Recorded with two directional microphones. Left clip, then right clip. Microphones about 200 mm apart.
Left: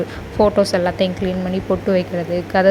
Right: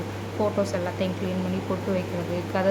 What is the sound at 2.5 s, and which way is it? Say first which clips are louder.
Speech: left 11 dB; 25° left (ahead or behind).